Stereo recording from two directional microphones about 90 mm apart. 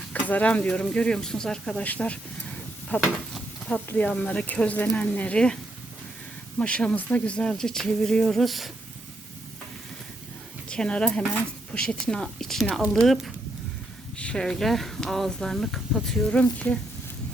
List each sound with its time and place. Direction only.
0.1 s speech: 15° left (ahead or behind)
3.0 s a sound: 5° left (ahead or behind)
3.9 s speech: 15° left (ahead or behind)
6.6 s speech: 10° left (ahead or behind)
10.7 s speech: 10° left (ahead or behind)
16.3 s speech: 15° left (ahead or behind)